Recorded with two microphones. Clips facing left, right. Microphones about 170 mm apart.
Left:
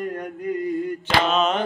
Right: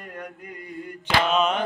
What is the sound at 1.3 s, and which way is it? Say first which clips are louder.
Mantra: even; 10° right (ahead or behind).